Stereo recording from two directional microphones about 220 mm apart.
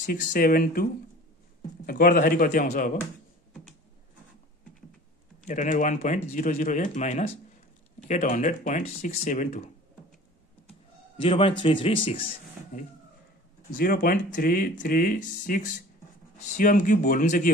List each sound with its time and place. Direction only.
0.0 s speech: 35° left (ahead or behind)
1.9 s speech: 45° left (ahead or behind)
5.5 s speech: 35° left (ahead or behind)
11.1 s a man's voice: 25° left (ahead or behind)
13.7 s speech: 40° left (ahead or behind)